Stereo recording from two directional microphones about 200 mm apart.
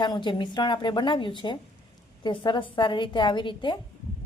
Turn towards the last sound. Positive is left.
turn(degrees=25)  # may be behind; listen again after turning